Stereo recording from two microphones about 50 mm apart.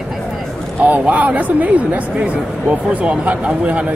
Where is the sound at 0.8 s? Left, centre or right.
Right.